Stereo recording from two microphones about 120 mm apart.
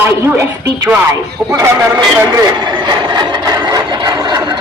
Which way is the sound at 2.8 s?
40° right (ahead or behind).